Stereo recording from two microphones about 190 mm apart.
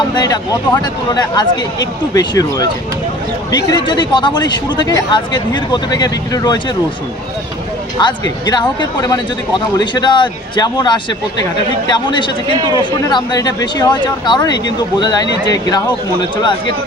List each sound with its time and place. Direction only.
0.1 s speech: 20° left (ahead or behind)
8.0 s speech: 20° left (ahead or behind)